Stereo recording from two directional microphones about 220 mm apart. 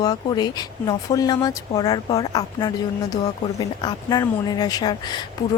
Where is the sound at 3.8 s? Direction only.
20° left (ahead or behind).